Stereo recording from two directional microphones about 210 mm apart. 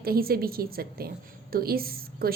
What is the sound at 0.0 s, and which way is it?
A woman's voice, 45° right (ahead or behind).